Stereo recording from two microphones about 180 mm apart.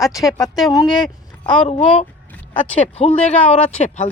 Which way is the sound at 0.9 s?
Centre (ahead or behind).